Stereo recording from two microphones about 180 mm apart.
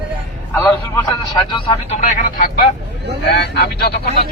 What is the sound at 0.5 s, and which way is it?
A man's voice, 20° left (ahead or behind).